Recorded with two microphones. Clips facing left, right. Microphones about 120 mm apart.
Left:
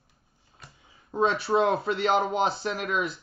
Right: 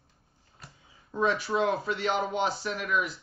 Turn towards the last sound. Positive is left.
turn(degrees=30)  # may be behind; listen again after turning